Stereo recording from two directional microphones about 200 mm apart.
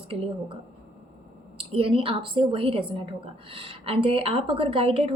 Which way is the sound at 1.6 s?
25° right (ahead or behind).